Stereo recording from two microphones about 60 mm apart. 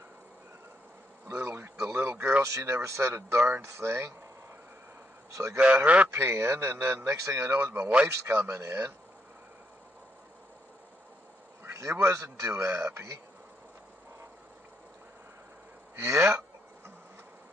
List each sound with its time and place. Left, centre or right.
1.3 s bee: right
1.8 s a sound: right
2.4 s a man's voice: right
5.3 s a man's voice: right
7.5 s a man's voice: right
11.6 s a man's voice: right
16.0 s a man's voice: right